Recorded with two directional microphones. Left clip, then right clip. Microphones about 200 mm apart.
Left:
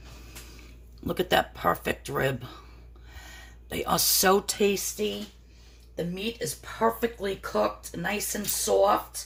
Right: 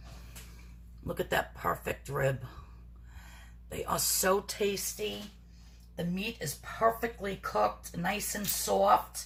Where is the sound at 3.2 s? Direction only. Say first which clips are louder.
Left 8 dB; 35° left (ahead or behind).